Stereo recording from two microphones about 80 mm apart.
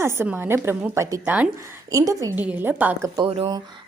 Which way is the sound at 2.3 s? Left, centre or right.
Right.